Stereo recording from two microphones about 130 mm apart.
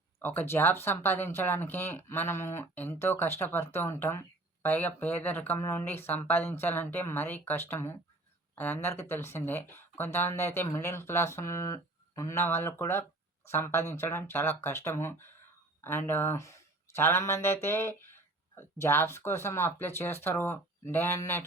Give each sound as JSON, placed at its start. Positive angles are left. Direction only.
{"t": 0.2, "sound": "speech", "side_deg": 15}